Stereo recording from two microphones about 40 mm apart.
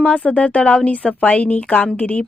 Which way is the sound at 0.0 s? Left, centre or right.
Left.